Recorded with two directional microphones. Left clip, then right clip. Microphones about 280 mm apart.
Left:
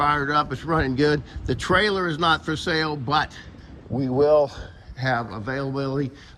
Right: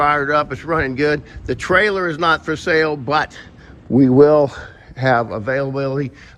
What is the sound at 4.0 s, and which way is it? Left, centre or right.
Speech, right.